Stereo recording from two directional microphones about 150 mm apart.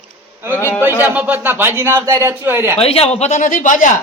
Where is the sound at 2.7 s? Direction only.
40° left (ahead or behind); by 3.9 s 60° left (ahead or behind).